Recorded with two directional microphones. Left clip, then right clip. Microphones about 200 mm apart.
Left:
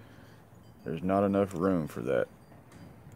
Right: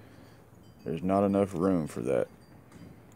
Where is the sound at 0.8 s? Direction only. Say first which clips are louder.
Right 1 dB; centre (ahead or behind).